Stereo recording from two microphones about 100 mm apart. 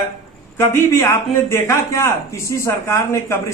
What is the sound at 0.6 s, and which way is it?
A man's voice, 25° left (ahead or behind).